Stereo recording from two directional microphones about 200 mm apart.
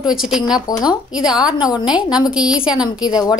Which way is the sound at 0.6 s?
20° left (ahead or behind).